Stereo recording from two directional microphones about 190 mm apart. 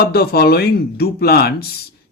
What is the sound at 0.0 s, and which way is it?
Speech, 55° left (ahead or behind).